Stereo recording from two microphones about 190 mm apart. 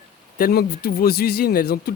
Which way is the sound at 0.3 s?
50° left (ahead or behind).